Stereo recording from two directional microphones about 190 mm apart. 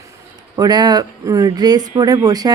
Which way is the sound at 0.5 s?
20° right (ahead or behind).